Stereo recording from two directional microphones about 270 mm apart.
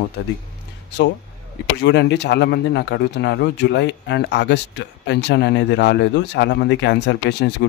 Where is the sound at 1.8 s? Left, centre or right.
Left.